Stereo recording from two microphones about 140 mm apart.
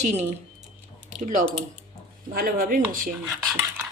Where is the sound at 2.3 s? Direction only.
90° right.